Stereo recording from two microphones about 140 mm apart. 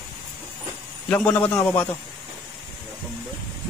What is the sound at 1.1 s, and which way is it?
Speech, 10° left (ahead or behind).